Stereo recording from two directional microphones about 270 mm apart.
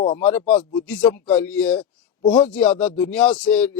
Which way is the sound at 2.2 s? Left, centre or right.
Centre.